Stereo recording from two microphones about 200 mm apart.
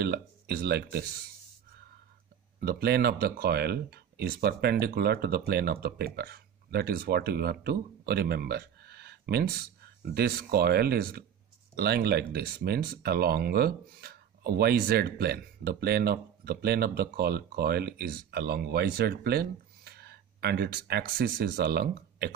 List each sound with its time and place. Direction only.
0.0 s speech: 50° right (ahead or behind)
2.6 s speech: 50° right (ahead or behind)